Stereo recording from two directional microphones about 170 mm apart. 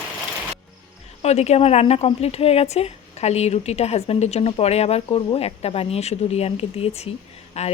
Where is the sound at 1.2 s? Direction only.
40° left (ahead or behind).